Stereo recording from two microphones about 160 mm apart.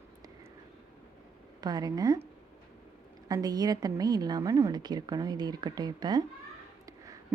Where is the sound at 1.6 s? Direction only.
25° right (ahead or behind).